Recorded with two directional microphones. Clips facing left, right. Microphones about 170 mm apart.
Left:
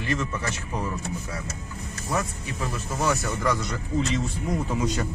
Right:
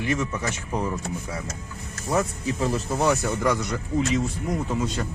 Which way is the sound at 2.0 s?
30° right (ahead or behind).